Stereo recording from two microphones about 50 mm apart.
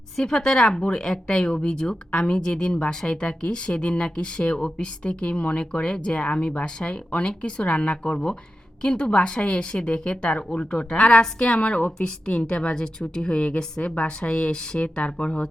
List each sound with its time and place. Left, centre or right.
0.2 s speech: centre
11.9 s a woman's voice: centre